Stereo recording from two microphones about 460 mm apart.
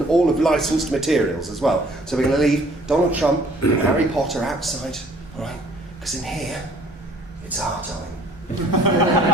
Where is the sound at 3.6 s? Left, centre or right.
Left.